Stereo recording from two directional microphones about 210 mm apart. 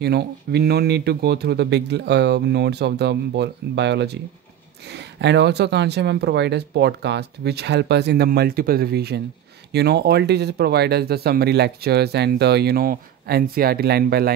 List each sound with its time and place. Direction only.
0.0 s speech: 50° right (ahead or behind)